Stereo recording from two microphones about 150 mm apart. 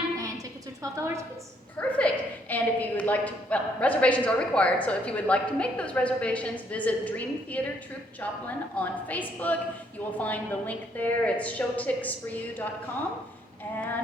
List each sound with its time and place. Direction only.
0.8 s a woman's voice: 20° right (ahead or behind)
1.8 s a woman's voice: 10° left (ahead or behind)